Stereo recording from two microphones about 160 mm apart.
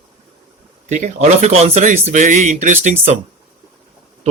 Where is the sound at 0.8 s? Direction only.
50° right (ahead or behind).